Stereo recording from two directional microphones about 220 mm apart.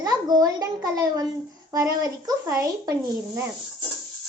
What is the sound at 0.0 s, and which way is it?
A child's voice, 15° right (ahead or behind).